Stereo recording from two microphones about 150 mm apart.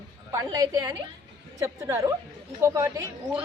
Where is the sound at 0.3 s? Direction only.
25° right (ahead or behind).